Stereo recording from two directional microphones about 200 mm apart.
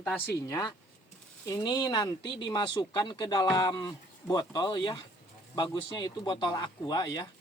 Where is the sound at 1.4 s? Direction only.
20° left (ahead or behind).